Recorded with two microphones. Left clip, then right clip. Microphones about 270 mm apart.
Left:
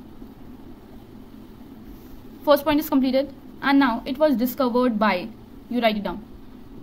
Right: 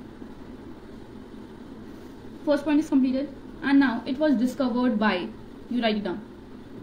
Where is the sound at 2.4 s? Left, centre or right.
Left.